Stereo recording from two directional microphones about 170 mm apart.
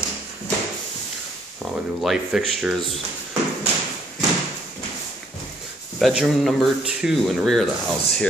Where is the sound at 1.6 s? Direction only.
Centre (ahead or behind).